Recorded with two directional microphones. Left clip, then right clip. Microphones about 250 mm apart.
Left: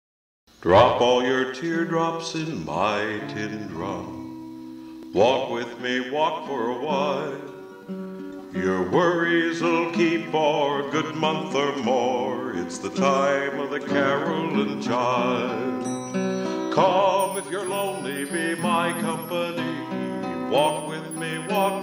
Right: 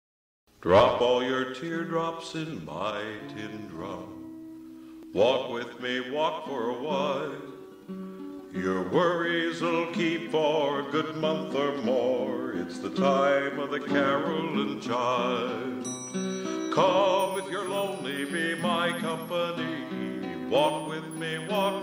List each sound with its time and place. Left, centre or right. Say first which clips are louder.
0.7 s music: left 4 dB; centre
5.1 s music: left 4 dB; centre
8.5 s music: left 4 dB; centre
11.0 s music: left 4 dB; centre